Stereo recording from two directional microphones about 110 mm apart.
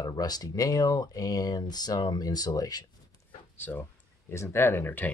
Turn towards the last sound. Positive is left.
turn(degrees=20)  # may be behind; listen again after turning